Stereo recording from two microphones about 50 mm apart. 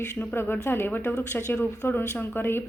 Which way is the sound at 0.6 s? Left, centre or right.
Left.